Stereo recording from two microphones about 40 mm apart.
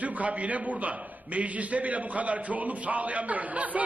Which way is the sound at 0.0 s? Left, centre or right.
Right.